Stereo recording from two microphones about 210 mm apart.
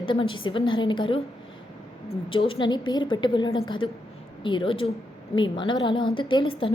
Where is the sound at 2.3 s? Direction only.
25° left (ahead or behind).